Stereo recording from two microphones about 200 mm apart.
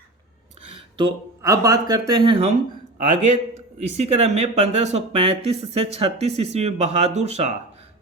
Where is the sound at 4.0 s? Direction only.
35° right (ahead or behind).